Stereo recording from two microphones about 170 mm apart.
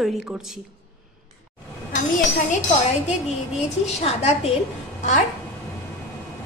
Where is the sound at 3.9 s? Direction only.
40° left (ahead or behind).